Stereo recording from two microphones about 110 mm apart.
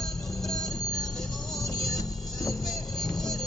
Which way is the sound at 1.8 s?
35° left (ahead or behind).